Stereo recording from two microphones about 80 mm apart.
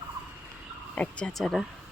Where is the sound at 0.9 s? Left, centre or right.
Centre.